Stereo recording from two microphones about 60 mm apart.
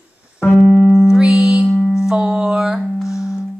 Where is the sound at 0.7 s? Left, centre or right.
Centre.